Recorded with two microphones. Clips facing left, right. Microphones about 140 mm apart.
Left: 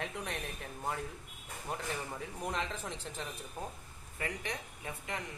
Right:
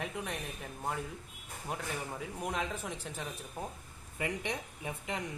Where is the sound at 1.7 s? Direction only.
5° right (ahead or behind).